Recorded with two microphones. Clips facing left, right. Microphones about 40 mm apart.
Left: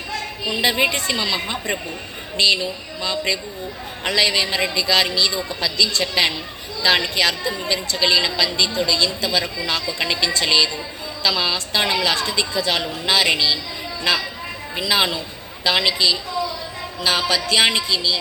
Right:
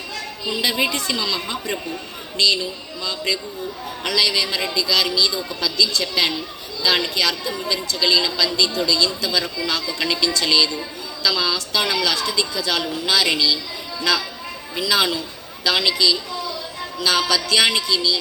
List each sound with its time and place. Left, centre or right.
0.6 s a woman's voice: left
3.0 s a woman's voice: left
14.8 s a woman's voice: left